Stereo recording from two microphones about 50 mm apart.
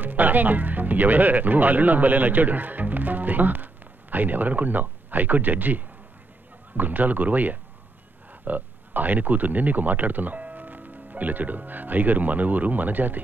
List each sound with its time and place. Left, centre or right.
0.0 s speech: right